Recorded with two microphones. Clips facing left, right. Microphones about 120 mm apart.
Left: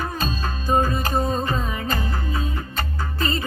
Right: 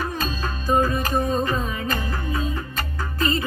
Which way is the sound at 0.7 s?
30° left (ahead or behind).